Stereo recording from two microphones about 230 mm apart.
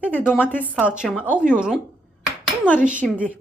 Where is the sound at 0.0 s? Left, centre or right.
Centre.